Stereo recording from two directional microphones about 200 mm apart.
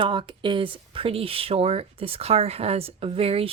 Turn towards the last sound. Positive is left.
turn(degrees=-30)  # may be behind; listen again after turning